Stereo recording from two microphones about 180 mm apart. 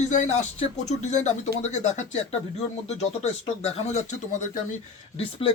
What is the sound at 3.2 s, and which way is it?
Speech, 35° left (ahead or behind).